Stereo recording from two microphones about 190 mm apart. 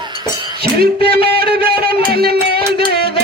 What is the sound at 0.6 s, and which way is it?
Music, 55° right (ahead or behind).